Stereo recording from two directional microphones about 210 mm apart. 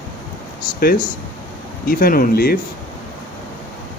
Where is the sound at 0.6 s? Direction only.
45° left (ahead or behind).